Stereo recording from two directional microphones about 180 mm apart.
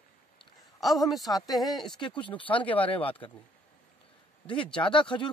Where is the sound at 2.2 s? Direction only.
30° left (ahead or behind).